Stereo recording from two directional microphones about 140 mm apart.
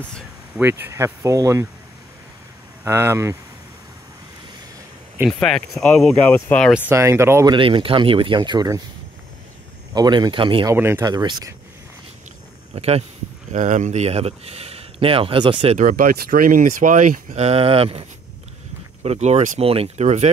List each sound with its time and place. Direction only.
0.6 s speech: 15° right (ahead or behind)
2.8 s speech: 20° right (ahead or behind)
5.4 s speech: 5° left (ahead or behind)
6.9 s speech: 20° right (ahead or behind)
7.5 s speech: 40° right (ahead or behind)
9.9 s speech: 30° right (ahead or behind)
10.7 s speech: 15° right (ahead or behind)
11.1 s speech: 30° right (ahead or behind)
12.7 s speech: 45° right (ahead or behind)
13.5 s speech: 60° right (ahead or behind); by 15.5 s 35° right (ahead or behind)
15.8 s speech: 80° right
17.4 s speech: 45° right (ahead or behind)
19.0 s speech: 50° right (ahead or behind)
19.6 s speech: 45° right (ahead or behind)